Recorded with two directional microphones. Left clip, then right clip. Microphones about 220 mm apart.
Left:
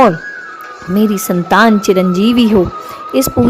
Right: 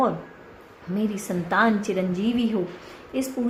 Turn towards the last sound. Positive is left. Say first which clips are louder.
# left 15 dB
turn(degrees=40)  # may be behind; listen again after turning